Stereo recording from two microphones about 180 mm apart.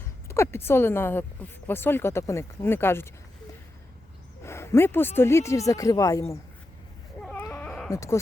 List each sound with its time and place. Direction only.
0.3 s speech: 15° left (ahead or behind)
4.4 s speech: 15° left (ahead or behind)
7.2 s baby cry: 5° left (ahead or behind)
7.9 s speech: 15° left (ahead or behind)